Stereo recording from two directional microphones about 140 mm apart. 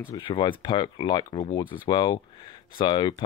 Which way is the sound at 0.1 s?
35° left (ahead or behind).